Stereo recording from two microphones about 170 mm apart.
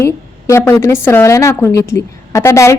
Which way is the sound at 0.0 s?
15° left (ahead or behind).